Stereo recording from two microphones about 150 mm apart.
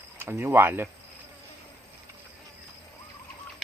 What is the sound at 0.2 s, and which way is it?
Speech, 15° right (ahead or behind).